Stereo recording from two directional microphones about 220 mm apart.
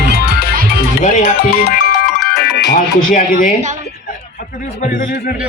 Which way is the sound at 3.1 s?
35° left (ahead or behind).